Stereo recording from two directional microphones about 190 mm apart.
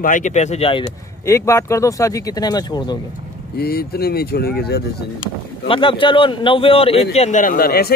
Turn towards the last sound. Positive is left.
turn(degrees=50)  # may be behind; listen again after turning